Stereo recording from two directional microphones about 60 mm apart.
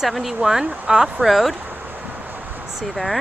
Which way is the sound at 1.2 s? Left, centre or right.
Centre.